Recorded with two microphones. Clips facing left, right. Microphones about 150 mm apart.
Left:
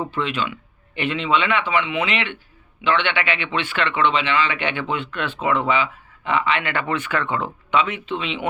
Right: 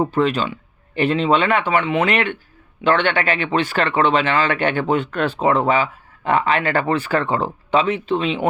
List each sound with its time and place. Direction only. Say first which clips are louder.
0.0 s speech: right 6 dB; 40° right (ahead or behind)